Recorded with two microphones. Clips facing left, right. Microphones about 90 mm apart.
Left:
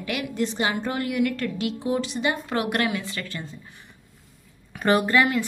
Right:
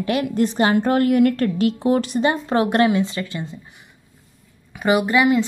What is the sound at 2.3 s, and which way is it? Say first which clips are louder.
Speech: right 5 dB; 30° right (ahead or behind).